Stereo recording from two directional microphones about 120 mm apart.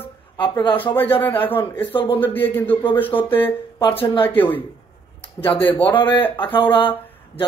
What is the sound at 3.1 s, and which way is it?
Speech, 45° left (ahead or behind).